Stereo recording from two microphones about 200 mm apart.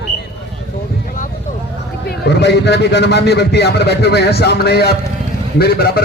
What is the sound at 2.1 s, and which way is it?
A man's voice, 55° left (ahead or behind).